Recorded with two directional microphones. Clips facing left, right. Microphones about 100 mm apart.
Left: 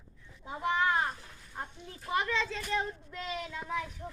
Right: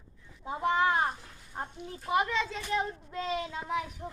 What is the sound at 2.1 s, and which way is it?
A child's voice, 15° right (ahead or behind).